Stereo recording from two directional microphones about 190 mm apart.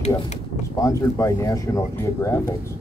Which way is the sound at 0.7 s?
15° left (ahead or behind).